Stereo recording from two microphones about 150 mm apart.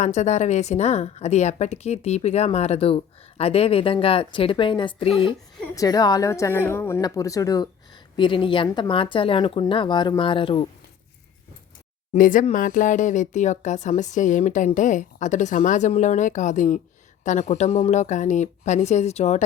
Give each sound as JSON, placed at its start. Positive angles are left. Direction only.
{"t": 0.0, "sound": "a woman's voice", "side_deg": 50}
{"t": 5.7, "sound": "a woman's voice", "side_deg": 25}
{"t": 12.1, "sound": "a woman's voice", "side_deg": 65}